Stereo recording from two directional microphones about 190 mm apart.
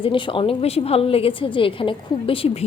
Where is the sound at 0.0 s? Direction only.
25° left (ahead or behind).